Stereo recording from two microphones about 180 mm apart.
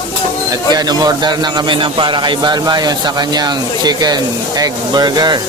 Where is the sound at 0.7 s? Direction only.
20° right (ahead or behind).